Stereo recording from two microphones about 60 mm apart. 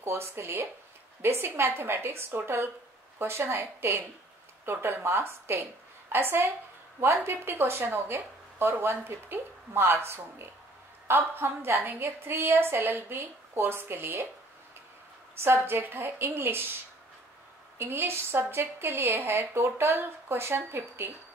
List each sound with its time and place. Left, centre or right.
0.0 s speech: right
15.4 s speech: right
17.7 s speech: right